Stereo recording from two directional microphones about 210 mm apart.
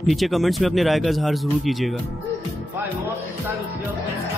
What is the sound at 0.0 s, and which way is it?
Speech, centre (ahead or behind).